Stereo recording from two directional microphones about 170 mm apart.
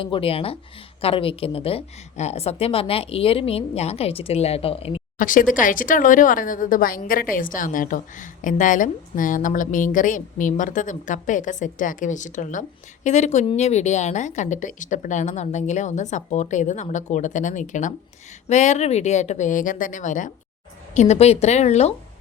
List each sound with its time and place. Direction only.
0.0 s a woman's voice: 30° left (ahead or behind)
5.1 s a woman's voice: 50° left (ahead or behind)